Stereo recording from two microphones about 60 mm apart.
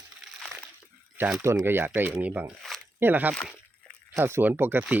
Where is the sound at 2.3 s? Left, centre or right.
Right.